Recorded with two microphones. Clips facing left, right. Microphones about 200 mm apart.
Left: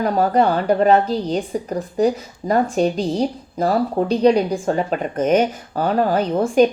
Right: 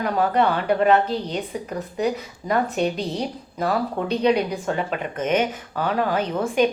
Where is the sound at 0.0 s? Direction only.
45° left (ahead or behind).